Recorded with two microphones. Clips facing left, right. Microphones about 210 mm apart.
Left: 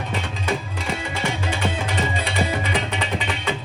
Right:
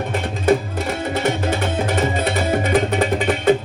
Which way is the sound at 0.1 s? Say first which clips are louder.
Right 10 dB; 50° right (ahead or behind).